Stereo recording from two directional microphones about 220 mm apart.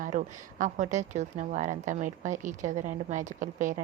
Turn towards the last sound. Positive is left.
turn(degrees=-35)  # may be behind; listen again after turning